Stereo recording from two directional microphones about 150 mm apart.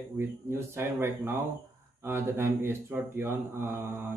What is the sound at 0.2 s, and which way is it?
Mantra, 15° right (ahead or behind).